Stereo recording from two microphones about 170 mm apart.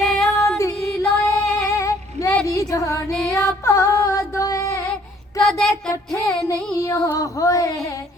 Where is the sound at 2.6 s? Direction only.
20° left (ahead or behind).